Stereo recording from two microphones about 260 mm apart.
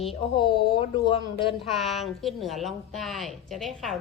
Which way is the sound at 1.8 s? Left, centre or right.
Centre.